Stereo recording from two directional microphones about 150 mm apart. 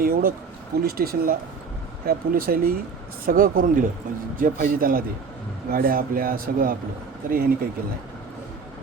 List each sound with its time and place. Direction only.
0.0 s speech: 75° right (ahead or behind)
0.8 s speech: 90° right
2.0 s speech: 75° right (ahead or behind)